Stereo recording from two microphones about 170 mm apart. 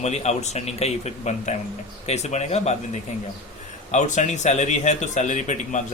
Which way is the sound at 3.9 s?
45° left (ahead or behind).